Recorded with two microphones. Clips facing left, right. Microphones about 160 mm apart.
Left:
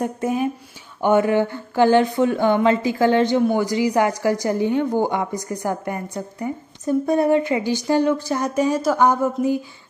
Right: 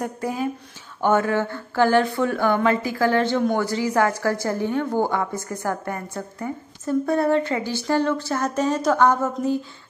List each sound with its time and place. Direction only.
0.0 s speech: 20° left (ahead or behind)